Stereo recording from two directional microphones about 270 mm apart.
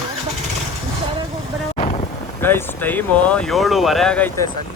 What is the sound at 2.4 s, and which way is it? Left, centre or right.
Speech, centre.